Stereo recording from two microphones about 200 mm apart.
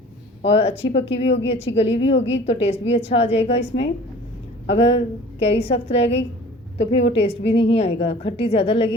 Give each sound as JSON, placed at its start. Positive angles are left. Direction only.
{"t": 0.4, "sound": "a woman's voice", "side_deg": 30}
{"t": 1.2, "sound": "a woman's voice", "side_deg": 65}
{"t": 1.5, "sound": "a woman's voice", "side_deg": 30}